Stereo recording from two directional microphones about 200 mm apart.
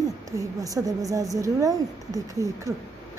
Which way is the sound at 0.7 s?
15° right (ahead or behind).